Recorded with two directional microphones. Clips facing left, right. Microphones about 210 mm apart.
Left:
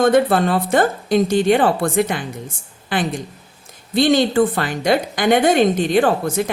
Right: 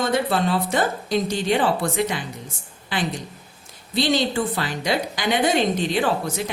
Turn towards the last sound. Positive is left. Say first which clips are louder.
# left 5 dB
turn(degrees=50)  # may be behind; listen again after turning